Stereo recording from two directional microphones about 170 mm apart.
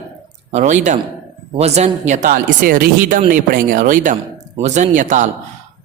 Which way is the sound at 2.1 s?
50° right (ahead or behind).